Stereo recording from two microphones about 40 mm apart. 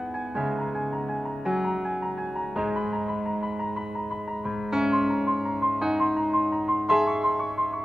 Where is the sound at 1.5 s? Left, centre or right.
Centre.